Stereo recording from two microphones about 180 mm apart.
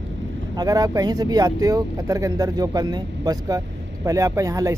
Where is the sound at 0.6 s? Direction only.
20° right (ahead or behind).